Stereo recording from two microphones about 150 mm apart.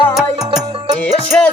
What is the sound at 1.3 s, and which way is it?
Music, 5° left (ahead or behind).